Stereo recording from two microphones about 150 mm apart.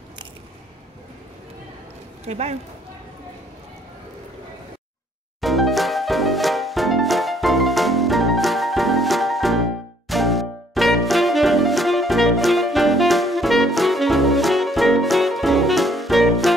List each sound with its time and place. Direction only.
2.2 s a man's voice: 45° right (ahead or behind)
5.4 s music: centre (ahead or behind)